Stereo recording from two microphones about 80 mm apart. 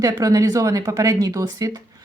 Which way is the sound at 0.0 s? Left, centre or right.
Right.